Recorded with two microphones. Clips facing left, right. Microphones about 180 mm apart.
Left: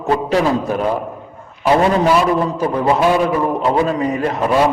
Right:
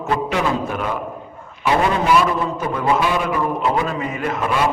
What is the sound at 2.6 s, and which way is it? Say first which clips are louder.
A man's voice: left 4 dB; 35° left (ahead or behind).